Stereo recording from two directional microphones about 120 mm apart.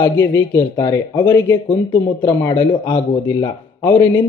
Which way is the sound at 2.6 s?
40° left (ahead or behind).